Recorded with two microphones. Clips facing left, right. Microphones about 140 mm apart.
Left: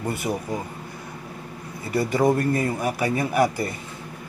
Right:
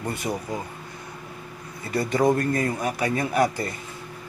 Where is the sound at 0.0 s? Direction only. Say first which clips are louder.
Left 2 dB; 5° left (ahead or behind).